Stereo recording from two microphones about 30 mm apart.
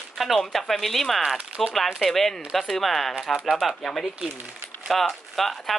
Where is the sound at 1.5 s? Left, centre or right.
Right.